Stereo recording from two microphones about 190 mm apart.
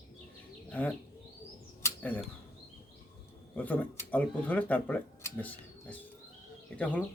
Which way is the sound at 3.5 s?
10° left (ahead or behind).